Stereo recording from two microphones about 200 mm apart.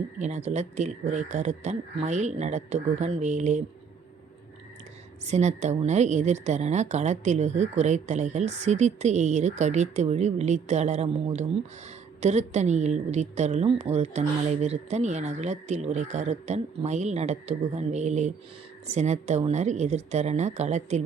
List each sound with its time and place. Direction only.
0.2 s a woman's voice: 35° right (ahead or behind)
5.2 s a woman's voice: 35° right (ahead or behind)